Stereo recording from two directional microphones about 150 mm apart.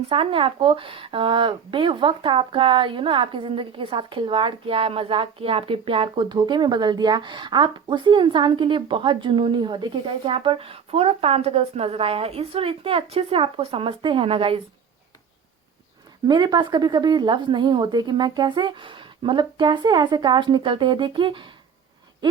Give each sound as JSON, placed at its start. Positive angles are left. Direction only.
{"t": 0.1, "sound": "speech", "side_deg": -35}
{"t": 16.2, "sound": "speech", "side_deg": -30}